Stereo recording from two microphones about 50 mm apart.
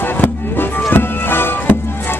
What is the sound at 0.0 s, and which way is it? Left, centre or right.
Music, left.